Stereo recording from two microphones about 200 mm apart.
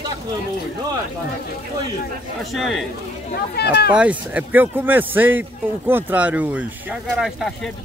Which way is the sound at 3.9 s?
5° right (ahead or behind).